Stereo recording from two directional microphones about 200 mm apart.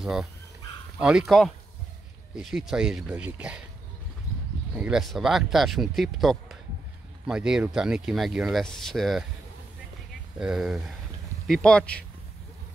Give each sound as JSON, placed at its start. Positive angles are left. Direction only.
{"t": 0.0, "sound": "speech", "side_deg": -5}
{"t": 4.7, "sound": "speech", "side_deg": -5}
{"t": 10.4, "sound": "speech", "side_deg": -5}